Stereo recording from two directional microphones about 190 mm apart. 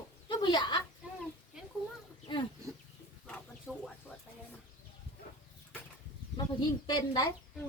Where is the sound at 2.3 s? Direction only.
25° left (ahead or behind).